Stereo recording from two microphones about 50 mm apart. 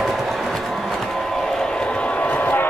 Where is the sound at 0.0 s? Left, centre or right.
Centre.